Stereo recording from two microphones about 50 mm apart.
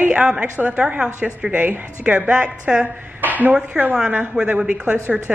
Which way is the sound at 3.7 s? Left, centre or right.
Centre.